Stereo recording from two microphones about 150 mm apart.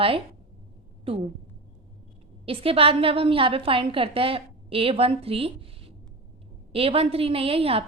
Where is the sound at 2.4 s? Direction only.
40° right (ahead or behind).